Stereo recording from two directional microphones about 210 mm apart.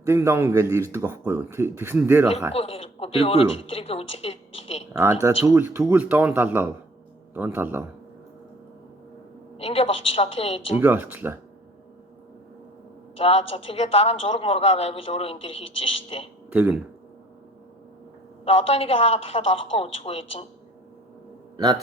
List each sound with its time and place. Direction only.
0.0 s speech: 10° right (ahead or behind)
2.5 s a woman's voice: 30° left (ahead or behind)
5.2 s speech: 15° right (ahead or behind)
9.6 s a woman's voice: 30° left (ahead or behind)
10.8 s speech: 10° right (ahead or behind)
13.1 s a woman's voice: 30° left (ahead or behind)
16.5 s speech: 10° right (ahead or behind)
18.4 s a woman's voice: 30° left (ahead or behind)
21.5 s a sound: 20° right (ahead or behind)